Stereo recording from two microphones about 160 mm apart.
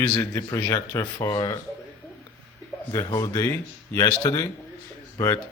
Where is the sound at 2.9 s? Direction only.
20° left (ahead or behind).